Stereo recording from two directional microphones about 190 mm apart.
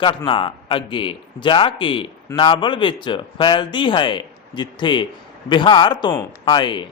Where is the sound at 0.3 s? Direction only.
25° left (ahead or behind).